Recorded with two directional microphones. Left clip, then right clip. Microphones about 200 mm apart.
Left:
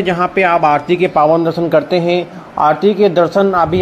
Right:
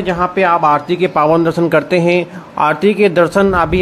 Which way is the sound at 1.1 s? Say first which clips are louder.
Even; 20° right (ahead or behind).